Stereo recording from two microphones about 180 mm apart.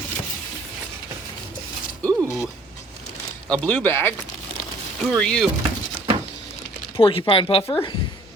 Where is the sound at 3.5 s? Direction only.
10° left (ahead or behind).